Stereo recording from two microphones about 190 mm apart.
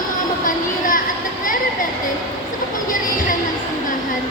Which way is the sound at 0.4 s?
45° left (ahead or behind).